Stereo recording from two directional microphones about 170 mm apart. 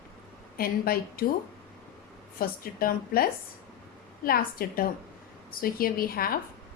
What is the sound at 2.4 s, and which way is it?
Speech, 60° left (ahead or behind).